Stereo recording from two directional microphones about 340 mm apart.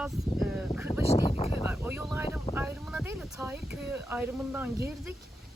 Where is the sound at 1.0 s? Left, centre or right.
Centre.